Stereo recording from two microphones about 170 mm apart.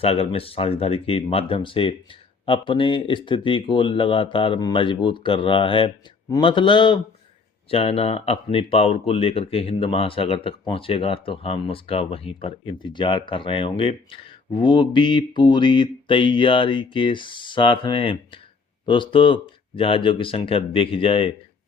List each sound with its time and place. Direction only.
0.0 s speech: 35° left (ahead or behind)